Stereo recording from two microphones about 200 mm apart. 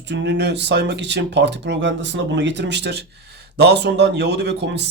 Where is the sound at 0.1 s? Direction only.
60° right (ahead or behind).